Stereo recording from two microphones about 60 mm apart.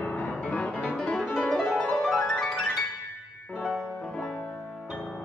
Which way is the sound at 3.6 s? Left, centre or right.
Centre.